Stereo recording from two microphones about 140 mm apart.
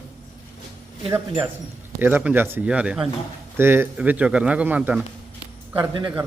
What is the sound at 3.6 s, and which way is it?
Speech, 15° right (ahead or behind).